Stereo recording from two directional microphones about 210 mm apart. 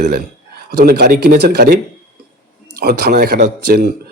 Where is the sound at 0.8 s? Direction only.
50° right (ahead or behind).